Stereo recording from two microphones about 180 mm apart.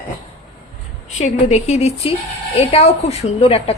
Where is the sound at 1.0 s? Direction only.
40° left (ahead or behind).